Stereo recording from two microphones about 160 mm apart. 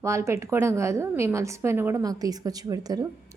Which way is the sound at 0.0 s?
20° right (ahead or behind).